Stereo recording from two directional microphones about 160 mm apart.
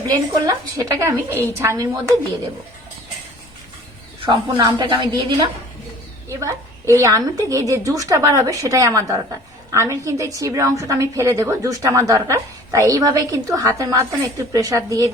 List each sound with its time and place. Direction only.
0.1 s a woman's voice: 20° right (ahead or behind)
4.5 s a woman's voice: 25° right (ahead or behind)